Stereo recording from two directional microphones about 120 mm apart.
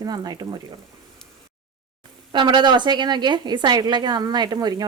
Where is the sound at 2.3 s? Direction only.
40° right (ahead or behind).